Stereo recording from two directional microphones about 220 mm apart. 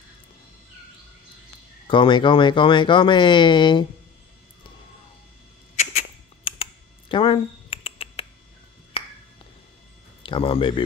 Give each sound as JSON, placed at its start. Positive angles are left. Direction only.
{"t": 1.9, "sound": "speech", "side_deg": 20}
{"t": 5.8, "sound": "a sound", "side_deg": 30}
{"t": 9.0, "sound": "finger snapping", "side_deg": 25}
{"t": 10.2, "sound": "speech", "side_deg": 25}